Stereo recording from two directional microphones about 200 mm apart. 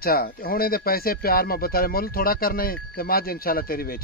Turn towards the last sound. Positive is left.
turn(degrees=50)  # may be behind; listen again after turning